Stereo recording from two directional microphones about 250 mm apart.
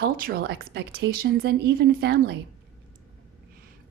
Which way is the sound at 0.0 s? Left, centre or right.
Right.